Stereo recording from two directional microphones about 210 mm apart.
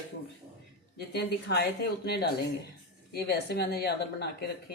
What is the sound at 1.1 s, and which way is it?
Speech, 50° left (ahead or behind).